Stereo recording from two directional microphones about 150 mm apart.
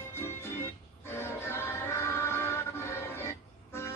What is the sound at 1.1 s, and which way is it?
Music, 15° left (ahead or behind).